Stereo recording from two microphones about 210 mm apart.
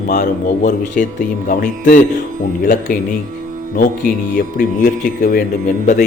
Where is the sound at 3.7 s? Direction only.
40° left (ahead or behind).